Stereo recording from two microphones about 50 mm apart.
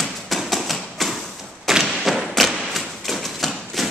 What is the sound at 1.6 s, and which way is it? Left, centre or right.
Thump, centre.